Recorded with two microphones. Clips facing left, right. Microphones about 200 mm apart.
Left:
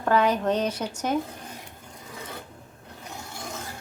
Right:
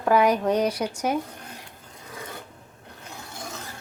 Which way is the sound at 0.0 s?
10° right (ahead or behind).